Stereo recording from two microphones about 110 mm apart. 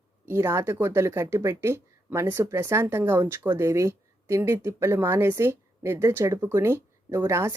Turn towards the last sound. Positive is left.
turn(degrees=-25)  # may be behind; listen again after turning